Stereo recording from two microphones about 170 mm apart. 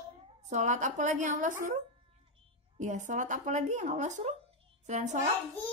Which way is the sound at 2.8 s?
45° right (ahead or behind).